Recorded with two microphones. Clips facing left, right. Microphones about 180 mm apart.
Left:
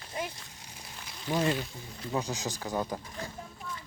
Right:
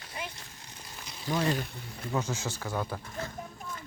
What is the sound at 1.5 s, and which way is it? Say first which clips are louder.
Speech: right 1 dB; 55° right (ahead or behind).